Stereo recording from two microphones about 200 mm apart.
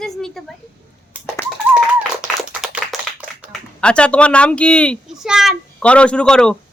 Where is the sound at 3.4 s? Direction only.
5° left (ahead or behind).